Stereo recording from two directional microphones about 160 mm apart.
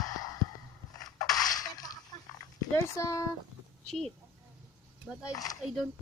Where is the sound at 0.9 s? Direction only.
25° left (ahead or behind).